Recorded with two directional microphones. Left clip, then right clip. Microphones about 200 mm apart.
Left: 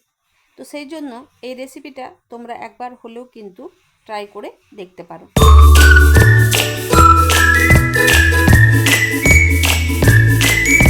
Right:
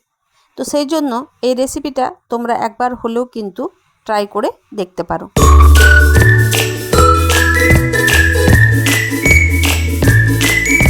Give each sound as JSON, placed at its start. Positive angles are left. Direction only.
{"t": 0.5, "sound": "a woman's voice", "side_deg": -40}
{"t": 5.3, "sound": "music", "side_deg": 0}